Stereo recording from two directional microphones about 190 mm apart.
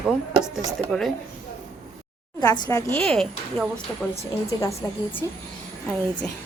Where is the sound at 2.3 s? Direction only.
20° left (ahead or behind).